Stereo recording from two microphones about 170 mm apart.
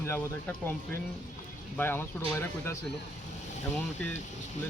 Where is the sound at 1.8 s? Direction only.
15° left (ahead or behind).